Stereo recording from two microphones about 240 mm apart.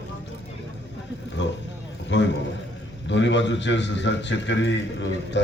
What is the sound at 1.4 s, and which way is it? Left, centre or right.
A man's voice, left.